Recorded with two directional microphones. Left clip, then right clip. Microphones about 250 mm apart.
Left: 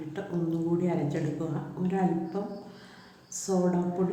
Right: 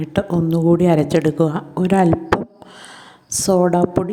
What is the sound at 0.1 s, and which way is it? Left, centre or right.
A woman's voice, right.